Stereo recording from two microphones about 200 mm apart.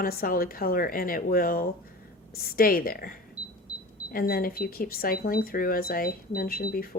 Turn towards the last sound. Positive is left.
turn(degrees=50)  # may be behind; listen again after turning